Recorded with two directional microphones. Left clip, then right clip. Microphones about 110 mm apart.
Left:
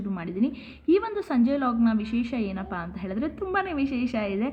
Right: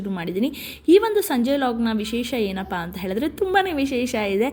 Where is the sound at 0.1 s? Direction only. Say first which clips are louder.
Right 4 dB; 25° right (ahead or behind).